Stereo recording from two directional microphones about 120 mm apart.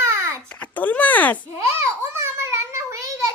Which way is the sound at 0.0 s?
20° right (ahead or behind).